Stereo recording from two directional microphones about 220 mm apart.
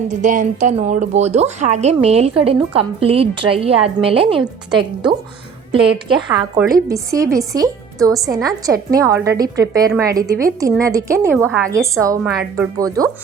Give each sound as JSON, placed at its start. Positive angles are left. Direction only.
{"t": 0.2, "sound": "speech", "side_deg": -35}
{"t": 5.8, "sound": "a woman's voice", "side_deg": -5}
{"t": 6.8, "sound": "a woman's voice", "side_deg": -15}
{"t": 11.4, "sound": "a woman's voice", "side_deg": 5}
{"t": 11.7, "sound": "a woman's voice", "side_deg": -15}